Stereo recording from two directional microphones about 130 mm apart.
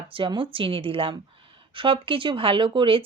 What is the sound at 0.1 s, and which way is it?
Speech, 40° right (ahead or behind).